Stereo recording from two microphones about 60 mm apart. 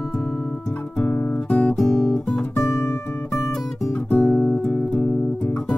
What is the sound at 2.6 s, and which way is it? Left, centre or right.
Guitar, left.